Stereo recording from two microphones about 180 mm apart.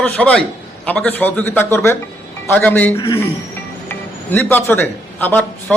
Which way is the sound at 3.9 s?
10° left (ahead or behind).